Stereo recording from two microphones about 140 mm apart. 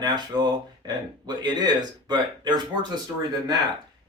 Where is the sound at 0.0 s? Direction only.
30° right (ahead or behind).